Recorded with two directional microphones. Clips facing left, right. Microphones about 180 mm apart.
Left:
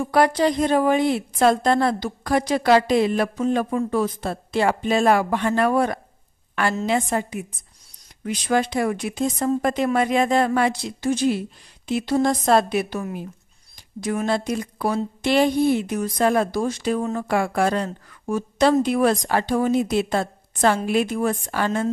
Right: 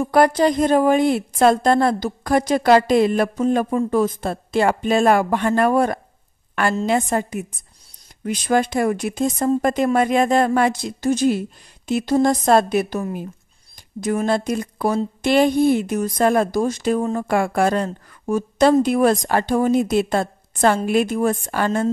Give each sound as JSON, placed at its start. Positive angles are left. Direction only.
{"t": 0.1, "sound": "a woman's voice", "side_deg": -45}
{"t": 17.0, "sound": "speech", "side_deg": -30}
{"t": 17.3, "sound": "a woman's voice", "side_deg": -50}